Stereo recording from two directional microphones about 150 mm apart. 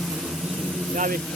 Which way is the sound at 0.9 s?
60° right (ahead or behind).